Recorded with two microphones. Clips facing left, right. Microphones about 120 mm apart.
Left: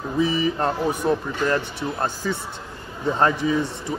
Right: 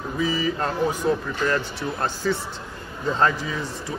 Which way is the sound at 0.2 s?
25° left (ahead or behind).